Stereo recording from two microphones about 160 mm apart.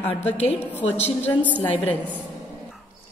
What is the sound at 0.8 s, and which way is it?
Speech, 40° left (ahead or behind).